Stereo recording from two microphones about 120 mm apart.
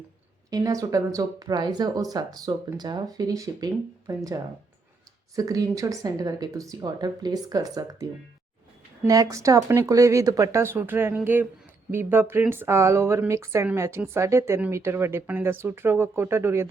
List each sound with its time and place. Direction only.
0.5 s speech: 30° right (ahead or behind)
9.0 s speech: 30° right (ahead or behind)